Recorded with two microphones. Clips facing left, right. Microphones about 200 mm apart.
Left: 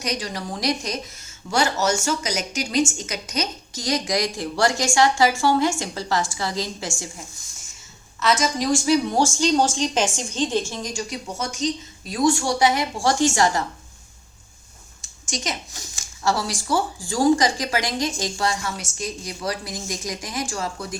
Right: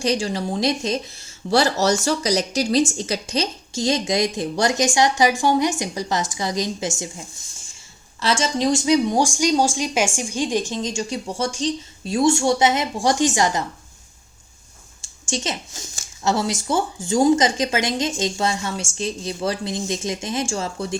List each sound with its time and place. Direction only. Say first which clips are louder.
0.0 s speech: right 6 dB; 30° right (ahead or behind)
8.2 s speech: right 1 dB; 30° right (ahead or behind)
15.0 s a sound: right 3 dB; 30° right (ahead or behind)
16.2 s speech: right 2 dB; 20° right (ahead or behind)